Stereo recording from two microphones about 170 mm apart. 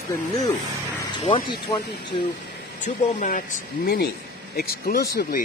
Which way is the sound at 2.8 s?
50° left (ahead or behind).